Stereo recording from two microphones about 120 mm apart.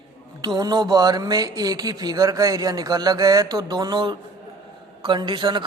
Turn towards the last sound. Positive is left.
turn(degrees=-40)  # may be behind; listen again after turning